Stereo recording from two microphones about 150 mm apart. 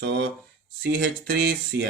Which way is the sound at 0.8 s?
90° right.